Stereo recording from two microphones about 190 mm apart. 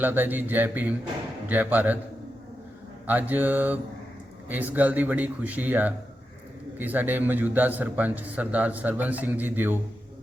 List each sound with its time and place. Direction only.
0.0 s a man's voice: 10° right (ahead or behind)
3.1 s a man's voice: 10° right (ahead or behind)